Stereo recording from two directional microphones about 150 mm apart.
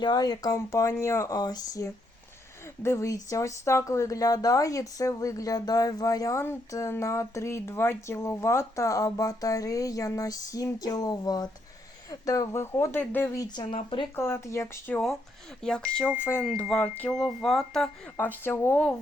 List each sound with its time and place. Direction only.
0.0 s speech: 25° left (ahead or behind)
14.2 s speech: 15° left (ahead or behind)
15.6 s speech: 5° left (ahead or behind)
18.4 s speech: 15° left (ahead or behind)